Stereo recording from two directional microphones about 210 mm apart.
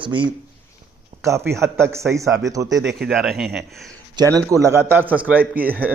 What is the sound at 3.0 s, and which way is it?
Speech, centre (ahead or behind).